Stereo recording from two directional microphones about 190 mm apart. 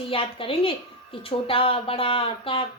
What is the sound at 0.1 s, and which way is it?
A woman's voice, 30° left (ahead or behind).